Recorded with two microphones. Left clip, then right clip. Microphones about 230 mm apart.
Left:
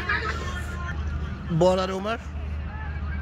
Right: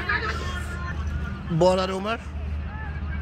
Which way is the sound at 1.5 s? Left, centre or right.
Centre.